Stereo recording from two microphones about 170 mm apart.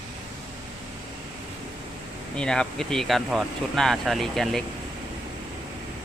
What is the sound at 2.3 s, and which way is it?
Speech, 5° left (ahead or behind).